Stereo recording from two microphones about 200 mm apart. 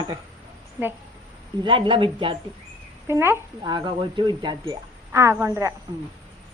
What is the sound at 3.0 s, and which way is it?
Speech, 15° right (ahead or behind).